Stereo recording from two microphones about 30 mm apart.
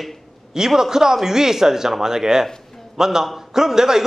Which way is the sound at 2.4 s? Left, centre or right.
Centre.